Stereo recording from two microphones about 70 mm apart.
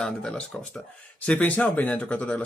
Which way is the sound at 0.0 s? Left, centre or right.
Centre.